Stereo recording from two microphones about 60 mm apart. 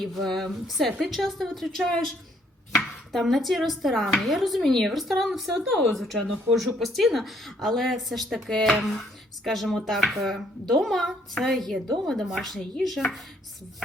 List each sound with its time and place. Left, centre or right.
0.0 s a woman's voice: centre
2.7 s chopping: centre
4.2 s a woman's voice: centre